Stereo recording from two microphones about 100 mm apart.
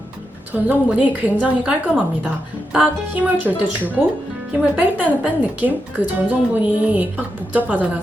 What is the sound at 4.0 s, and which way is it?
A woman's voice, 10° right (ahead or behind).